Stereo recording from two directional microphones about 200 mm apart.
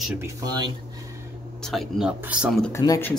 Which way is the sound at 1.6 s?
Centre (ahead or behind).